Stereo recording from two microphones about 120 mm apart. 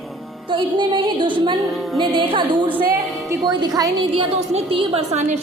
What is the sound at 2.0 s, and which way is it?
Speech, 45° right (ahead or behind).